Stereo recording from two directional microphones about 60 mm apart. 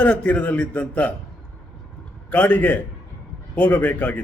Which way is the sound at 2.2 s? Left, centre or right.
Left.